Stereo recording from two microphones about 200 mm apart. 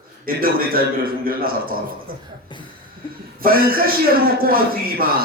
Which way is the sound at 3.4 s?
45° right (ahead or behind).